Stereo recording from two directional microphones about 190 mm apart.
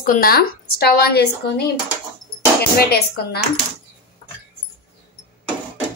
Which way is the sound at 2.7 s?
55° left (ahead or behind).